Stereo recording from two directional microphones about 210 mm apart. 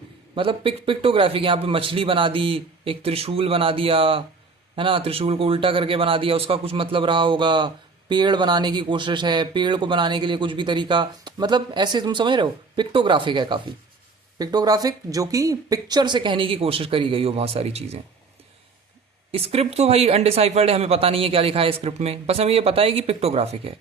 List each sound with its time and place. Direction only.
0.3 s speech: 25° right (ahead or behind)
19.3 s speech: 30° right (ahead or behind)